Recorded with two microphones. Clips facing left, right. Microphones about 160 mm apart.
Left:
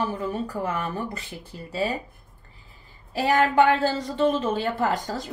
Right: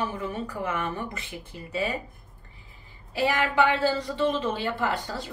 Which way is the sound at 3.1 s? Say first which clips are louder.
Left 4 dB; 45° left (ahead or behind).